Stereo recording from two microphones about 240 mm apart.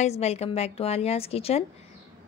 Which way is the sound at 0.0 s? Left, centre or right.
Left.